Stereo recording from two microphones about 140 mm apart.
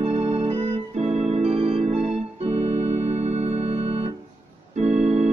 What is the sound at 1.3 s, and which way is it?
Music, 45° right (ahead or behind).